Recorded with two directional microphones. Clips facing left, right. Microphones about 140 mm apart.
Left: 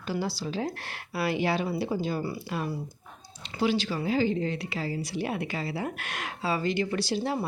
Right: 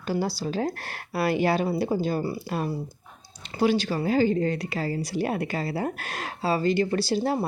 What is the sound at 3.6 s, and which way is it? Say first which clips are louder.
A woman's voice: right 4 dB; 45° right (ahead or behind).